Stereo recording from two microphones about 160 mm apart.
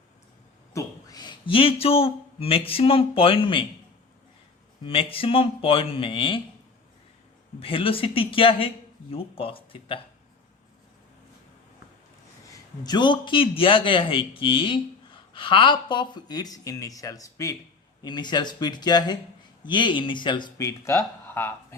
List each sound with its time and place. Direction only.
0.7 s speech: 25° left (ahead or behind)
4.8 s a man's voice: 35° left (ahead or behind)
7.6 s a man's voice: 35° left (ahead or behind)
12.8 s a man's voice: 25° left (ahead or behind)